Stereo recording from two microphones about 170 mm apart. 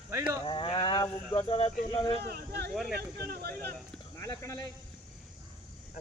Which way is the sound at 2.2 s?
70° right (ahead or behind).